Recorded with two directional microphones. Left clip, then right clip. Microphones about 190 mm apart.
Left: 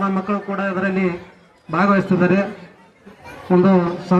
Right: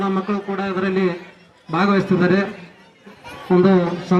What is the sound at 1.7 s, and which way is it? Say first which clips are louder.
Speech: left 2 dB; 15° left (ahead or behind).